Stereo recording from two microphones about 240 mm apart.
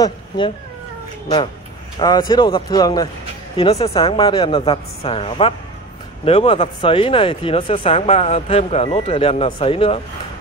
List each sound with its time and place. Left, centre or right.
2.0 s speech: centre